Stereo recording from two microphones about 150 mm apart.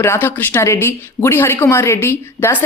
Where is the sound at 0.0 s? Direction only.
15° left (ahead or behind).